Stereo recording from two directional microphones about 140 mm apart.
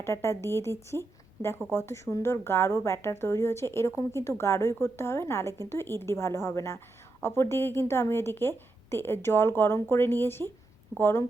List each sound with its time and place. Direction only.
0.0 s a woman's voice: 20° left (ahead or behind)